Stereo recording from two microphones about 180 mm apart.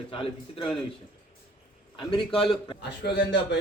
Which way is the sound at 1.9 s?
30° left (ahead or behind).